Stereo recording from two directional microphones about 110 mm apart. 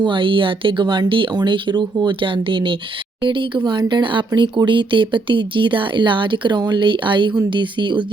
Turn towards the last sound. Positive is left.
turn(degrees=-45)  # may be behind; listen again after turning